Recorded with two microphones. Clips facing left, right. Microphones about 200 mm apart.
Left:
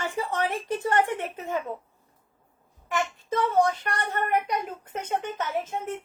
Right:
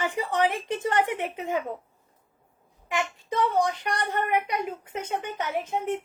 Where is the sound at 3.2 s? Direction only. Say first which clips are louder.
Left 2 dB; 15° right (ahead or behind).